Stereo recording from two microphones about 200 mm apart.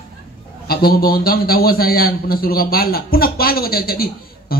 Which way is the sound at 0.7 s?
50° left (ahead or behind).